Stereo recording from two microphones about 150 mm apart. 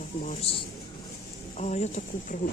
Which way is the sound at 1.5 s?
50° left (ahead or behind).